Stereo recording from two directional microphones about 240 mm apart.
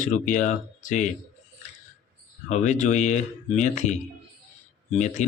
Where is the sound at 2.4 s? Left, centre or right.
Left.